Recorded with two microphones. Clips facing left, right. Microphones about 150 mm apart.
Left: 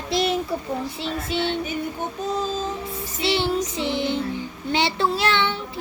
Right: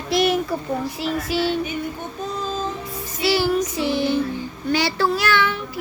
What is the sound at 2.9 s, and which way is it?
Child singing, 25° left (ahead or behind).